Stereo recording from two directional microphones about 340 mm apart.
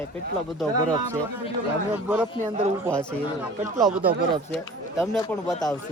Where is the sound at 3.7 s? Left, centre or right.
Centre.